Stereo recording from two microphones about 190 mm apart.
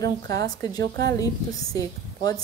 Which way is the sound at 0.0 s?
60° right (ahead or behind).